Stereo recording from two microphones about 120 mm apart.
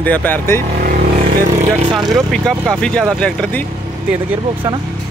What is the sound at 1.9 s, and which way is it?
Speech, 35° right (ahead or behind).